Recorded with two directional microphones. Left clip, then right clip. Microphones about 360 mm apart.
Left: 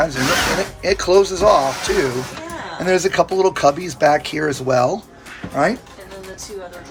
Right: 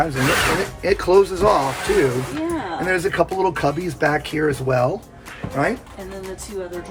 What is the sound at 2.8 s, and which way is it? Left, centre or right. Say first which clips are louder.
Speech: left 4 dB; centre.